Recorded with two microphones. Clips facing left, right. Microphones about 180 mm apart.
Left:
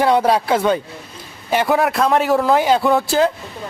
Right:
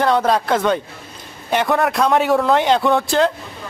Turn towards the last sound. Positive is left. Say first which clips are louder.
# left 1 dB
turn(degrees=5)  # may be behind; listen again after turning